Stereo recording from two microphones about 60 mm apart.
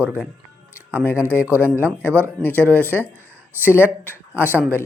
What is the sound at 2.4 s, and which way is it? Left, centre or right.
Speech, left.